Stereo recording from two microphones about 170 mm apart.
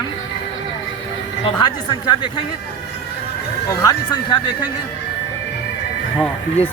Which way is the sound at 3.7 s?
20° left (ahead or behind).